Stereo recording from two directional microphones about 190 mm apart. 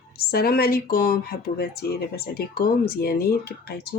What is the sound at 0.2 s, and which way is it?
Speech, 55° left (ahead or behind).